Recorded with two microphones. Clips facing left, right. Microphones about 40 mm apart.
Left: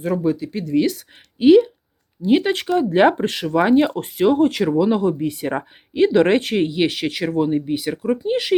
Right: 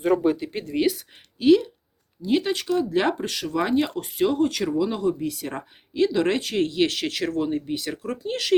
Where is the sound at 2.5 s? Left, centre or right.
Left.